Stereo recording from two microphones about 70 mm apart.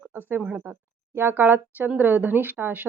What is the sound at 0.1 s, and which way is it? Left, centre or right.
A woman's voice, right.